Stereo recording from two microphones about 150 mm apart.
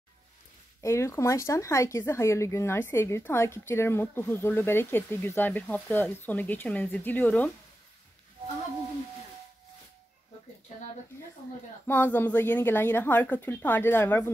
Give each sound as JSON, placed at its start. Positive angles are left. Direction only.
{"t": 0.7, "sound": "speech", "side_deg": 20}
{"t": 11.9, "sound": "speech", "side_deg": 10}